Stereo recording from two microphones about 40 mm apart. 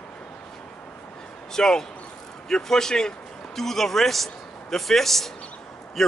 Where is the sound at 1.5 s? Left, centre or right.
Centre.